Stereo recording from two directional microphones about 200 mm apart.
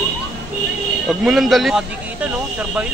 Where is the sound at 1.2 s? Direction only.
Centre (ahead or behind).